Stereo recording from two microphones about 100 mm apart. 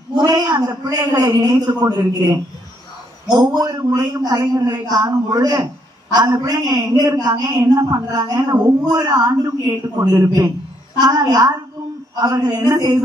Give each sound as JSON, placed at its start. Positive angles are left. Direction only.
{"t": 0.2, "sound": "a man's voice", "side_deg": -45}
{"t": 3.3, "sound": "a man's voice", "side_deg": -40}